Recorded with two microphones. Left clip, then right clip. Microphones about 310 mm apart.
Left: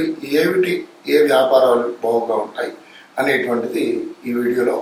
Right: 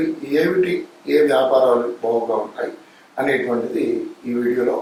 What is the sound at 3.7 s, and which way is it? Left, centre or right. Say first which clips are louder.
Speech: left 1 dB; right.